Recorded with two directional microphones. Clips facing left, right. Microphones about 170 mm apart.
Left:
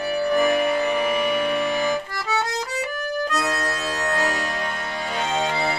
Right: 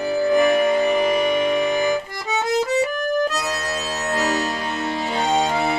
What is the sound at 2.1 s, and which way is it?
Music, 20° right (ahead or behind).